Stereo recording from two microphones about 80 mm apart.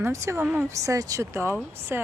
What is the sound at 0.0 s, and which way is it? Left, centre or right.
Speech, right.